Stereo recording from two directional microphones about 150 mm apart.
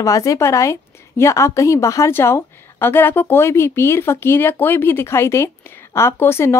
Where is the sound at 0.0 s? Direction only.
20° left (ahead or behind).